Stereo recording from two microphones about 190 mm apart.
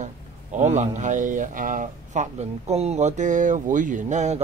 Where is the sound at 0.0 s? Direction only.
40° right (ahead or behind).